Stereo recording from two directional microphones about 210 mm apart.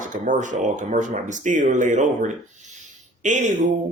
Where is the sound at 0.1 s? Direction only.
35° right (ahead or behind).